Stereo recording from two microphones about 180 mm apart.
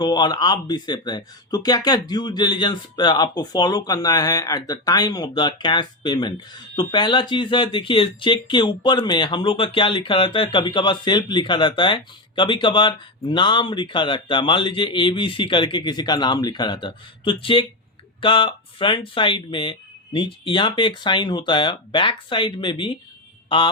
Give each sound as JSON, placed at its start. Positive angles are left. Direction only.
{"t": 0.0, "sound": "speech", "side_deg": 25}